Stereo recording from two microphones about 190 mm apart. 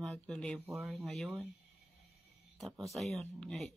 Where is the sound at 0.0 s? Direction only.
5° left (ahead or behind).